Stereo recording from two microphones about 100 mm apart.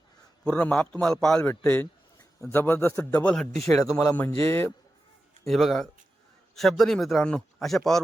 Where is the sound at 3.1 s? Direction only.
15° left (ahead or behind).